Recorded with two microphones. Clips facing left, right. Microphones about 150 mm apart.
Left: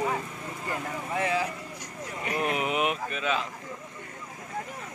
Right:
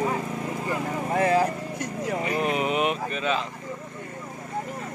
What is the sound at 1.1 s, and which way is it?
Speech, 45° right (ahead or behind).